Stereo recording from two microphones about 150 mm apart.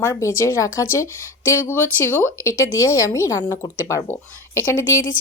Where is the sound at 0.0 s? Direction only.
20° left (ahead or behind).